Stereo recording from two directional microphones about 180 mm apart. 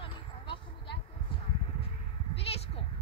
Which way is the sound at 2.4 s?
35° left (ahead or behind).